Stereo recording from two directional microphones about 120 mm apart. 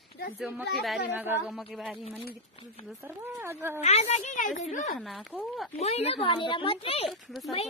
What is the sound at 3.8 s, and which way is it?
A woman's voice, 65° left (ahead or behind).